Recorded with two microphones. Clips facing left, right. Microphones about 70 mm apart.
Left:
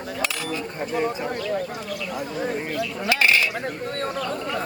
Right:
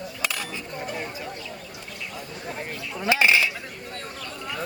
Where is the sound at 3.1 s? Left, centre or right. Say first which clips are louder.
Right 1 dB; centre.